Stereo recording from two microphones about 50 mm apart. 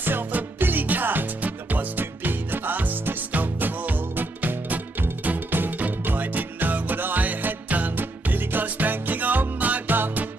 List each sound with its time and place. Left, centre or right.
0.0 s music: right